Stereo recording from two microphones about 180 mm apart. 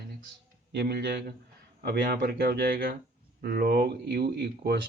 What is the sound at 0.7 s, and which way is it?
Speech, 65° right (ahead or behind).